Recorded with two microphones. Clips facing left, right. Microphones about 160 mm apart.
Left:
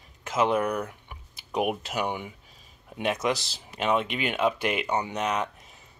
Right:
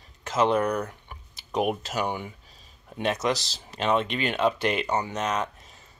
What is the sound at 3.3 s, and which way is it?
Speech, 55° left (ahead or behind).